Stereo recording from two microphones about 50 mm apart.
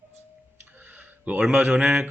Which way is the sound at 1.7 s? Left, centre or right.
Centre.